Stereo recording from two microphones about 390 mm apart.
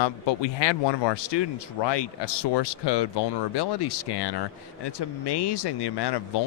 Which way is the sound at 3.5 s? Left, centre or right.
Left.